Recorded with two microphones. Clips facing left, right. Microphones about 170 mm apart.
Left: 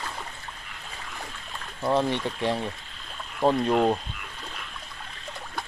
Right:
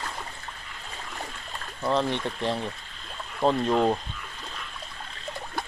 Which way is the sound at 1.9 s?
15° left (ahead or behind).